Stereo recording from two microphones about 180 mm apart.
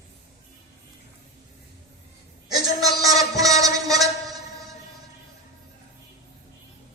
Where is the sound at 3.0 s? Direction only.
20° right (ahead or behind).